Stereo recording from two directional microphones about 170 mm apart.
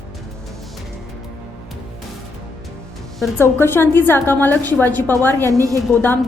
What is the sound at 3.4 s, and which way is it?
A woman's voice, 15° left (ahead or behind).